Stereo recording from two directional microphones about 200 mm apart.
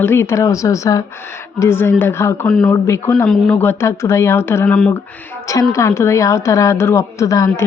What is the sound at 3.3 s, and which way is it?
Speech, centre (ahead or behind).